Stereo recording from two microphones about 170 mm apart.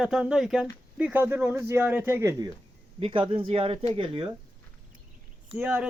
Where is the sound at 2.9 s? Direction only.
30° right (ahead or behind).